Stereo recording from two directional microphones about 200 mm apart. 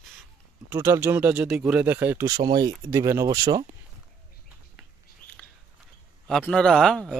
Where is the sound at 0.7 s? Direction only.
15° right (ahead or behind).